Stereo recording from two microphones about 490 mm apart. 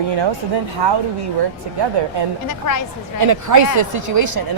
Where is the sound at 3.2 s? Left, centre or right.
Right.